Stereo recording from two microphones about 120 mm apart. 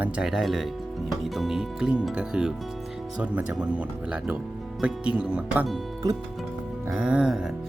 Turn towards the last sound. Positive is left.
turn(degrees=-5)  # may be behind; listen again after turning